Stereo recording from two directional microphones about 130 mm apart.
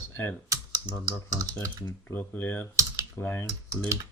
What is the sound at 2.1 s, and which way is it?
Speech, 15° left (ahead or behind).